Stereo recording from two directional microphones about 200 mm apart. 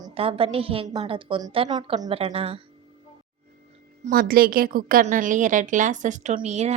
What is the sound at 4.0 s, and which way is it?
A woman's voice, 50° right (ahead or behind).